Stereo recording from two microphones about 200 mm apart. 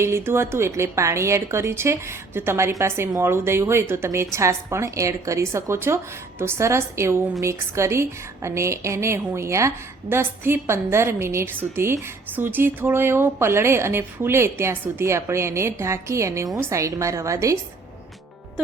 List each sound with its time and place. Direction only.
0.0 s a woman's voice: 15° right (ahead or behind)